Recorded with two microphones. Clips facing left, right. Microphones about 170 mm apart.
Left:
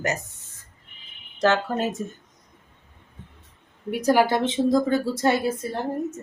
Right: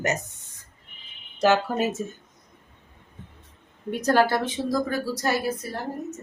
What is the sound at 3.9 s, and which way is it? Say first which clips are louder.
Speech: left 1 dB; 10° left (ahead or behind).